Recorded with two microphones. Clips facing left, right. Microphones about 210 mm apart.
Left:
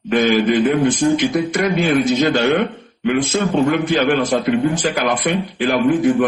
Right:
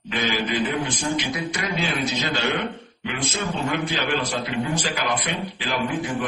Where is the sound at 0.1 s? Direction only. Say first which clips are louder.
Left 11 dB; 50° left (ahead or behind).